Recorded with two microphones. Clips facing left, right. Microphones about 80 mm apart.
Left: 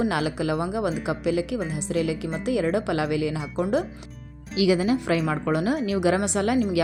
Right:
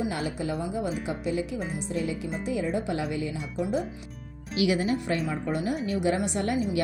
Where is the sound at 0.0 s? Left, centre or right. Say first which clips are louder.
Left 5 dB; left.